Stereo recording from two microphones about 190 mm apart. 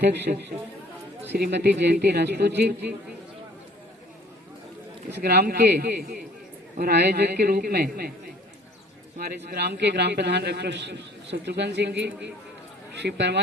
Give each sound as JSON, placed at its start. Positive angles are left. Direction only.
{"t": 0.0, "sound": "a man's voice", "side_deg": -60}
{"t": 5.1, "sound": "a man's voice", "side_deg": -55}
{"t": 9.1, "sound": "a man's voice", "side_deg": -55}